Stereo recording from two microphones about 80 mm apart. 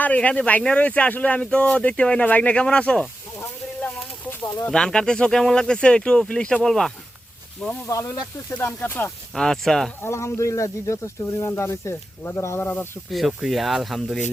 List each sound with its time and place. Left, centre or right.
0.0 s speech: centre
4.7 s speech: centre
7.9 s speech: left
8.4 s speech: left
9.3 s speech: centre
10.0 s speech: left
13.1 s speech: centre